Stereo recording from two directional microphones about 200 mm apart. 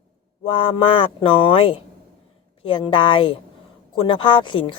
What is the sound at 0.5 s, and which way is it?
A woman's voice, 25° left (ahead or behind).